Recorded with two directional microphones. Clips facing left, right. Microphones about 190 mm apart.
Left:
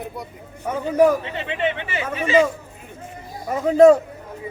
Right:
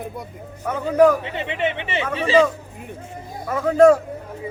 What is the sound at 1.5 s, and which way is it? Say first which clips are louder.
Speech: left 1 dB; 20° right (ahead or behind).